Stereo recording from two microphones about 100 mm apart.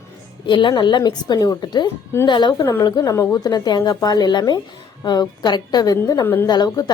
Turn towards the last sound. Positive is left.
turn(degrees=40)  # may be behind; listen again after turning